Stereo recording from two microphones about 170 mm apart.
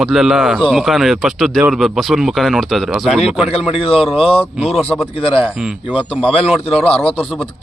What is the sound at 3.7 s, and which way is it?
Speech, 35° left (ahead or behind).